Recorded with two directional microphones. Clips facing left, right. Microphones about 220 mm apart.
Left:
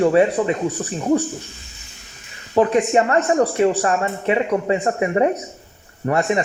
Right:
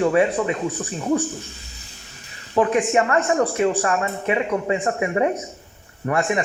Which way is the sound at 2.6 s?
30° left (ahead or behind).